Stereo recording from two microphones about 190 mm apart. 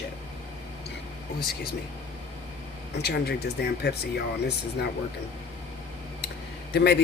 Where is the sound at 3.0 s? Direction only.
60° left (ahead or behind).